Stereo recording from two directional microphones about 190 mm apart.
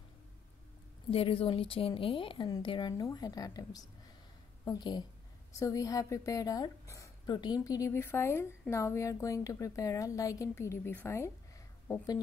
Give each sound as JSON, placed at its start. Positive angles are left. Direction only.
{"t": 1.1, "sound": "a woman's voice", "side_deg": 30}